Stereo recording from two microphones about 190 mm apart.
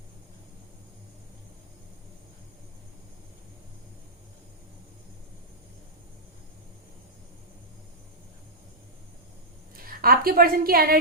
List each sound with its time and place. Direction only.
9.7 s a woman's voice: 50° right (ahead or behind)